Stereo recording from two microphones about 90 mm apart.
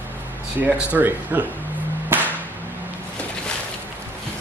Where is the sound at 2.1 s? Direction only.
20° right (ahead or behind).